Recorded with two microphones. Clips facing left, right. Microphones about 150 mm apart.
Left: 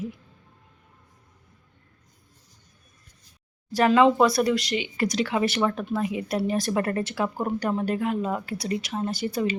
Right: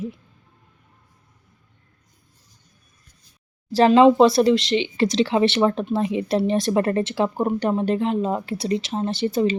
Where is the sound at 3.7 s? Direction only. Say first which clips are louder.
Right 5 dB; 25° right (ahead or behind).